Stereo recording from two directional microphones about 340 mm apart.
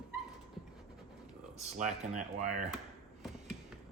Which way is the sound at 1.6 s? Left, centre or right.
Right.